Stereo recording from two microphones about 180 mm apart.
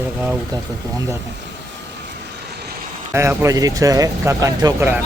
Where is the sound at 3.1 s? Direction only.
15° right (ahead or behind).